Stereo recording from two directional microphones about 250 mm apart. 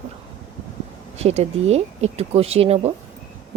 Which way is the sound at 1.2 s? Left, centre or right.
Right.